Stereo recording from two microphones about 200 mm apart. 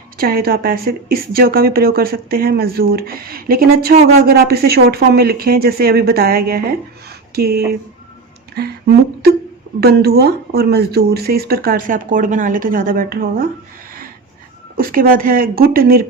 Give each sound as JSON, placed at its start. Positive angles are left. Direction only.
{"t": 0.2, "sound": "speech", "side_deg": -50}
{"t": 9.8, "sound": "speech", "side_deg": -50}
{"t": 14.8, "sound": "speech", "side_deg": -45}